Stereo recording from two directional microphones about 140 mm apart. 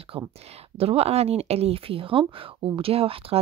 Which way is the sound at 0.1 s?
40° right (ahead or behind).